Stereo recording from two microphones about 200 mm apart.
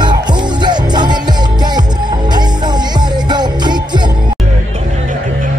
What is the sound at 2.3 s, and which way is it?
Music, 20° right (ahead or behind).